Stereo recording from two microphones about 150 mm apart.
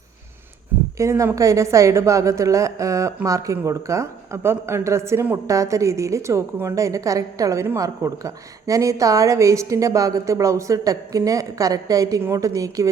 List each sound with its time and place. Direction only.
0.9 s a woman's voice: 20° right (ahead or behind)